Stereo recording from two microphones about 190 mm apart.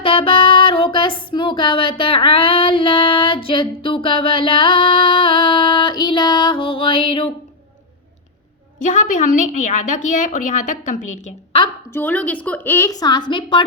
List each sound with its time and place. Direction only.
0.0 s female singing: 30° left (ahead or behind)
8.8 s a woman's voice: 45° left (ahead or behind)
11.9 s a woman's voice: 10° left (ahead or behind)